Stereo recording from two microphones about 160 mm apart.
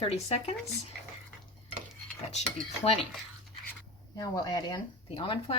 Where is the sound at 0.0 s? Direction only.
40° left (ahead or behind).